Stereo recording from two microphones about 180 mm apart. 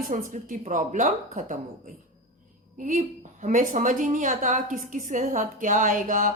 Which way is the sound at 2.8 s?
40° right (ahead or behind).